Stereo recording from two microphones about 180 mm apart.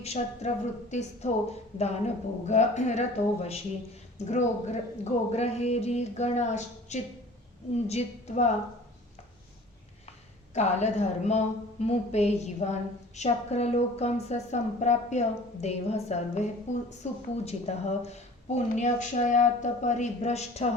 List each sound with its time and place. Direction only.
0.0 s speech: 40° left (ahead or behind)
10.5 s a woman's voice: 40° left (ahead or behind)